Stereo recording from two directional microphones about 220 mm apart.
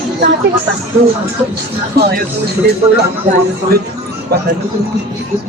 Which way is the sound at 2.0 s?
45° right (ahead or behind).